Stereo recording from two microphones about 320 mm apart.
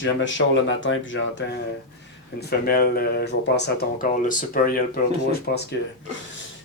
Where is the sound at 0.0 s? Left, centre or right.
Left.